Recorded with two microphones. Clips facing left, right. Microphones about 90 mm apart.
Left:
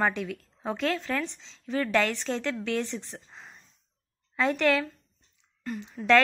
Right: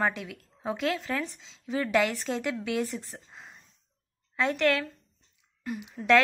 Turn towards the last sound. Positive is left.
turn(degrees=-5)  # may be behind; listen again after turning